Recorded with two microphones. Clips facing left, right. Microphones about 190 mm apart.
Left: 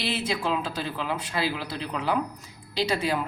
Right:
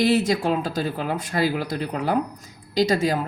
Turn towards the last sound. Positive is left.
turn(degrees=-40)  # may be behind; listen again after turning